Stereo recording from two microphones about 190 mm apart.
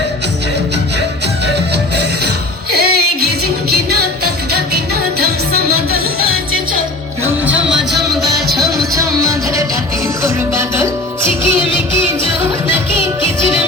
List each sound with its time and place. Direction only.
2.7 s music: 55° right (ahead or behind)
7.7 s music: centre (ahead or behind)
9.0 s music: 15° right (ahead or behind)